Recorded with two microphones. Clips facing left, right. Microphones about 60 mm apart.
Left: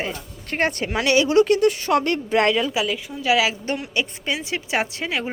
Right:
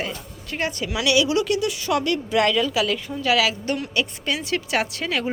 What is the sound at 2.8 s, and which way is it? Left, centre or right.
A woman's voice, centre.